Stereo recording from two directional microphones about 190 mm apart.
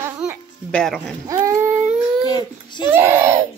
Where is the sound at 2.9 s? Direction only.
10° right (ahead or behind).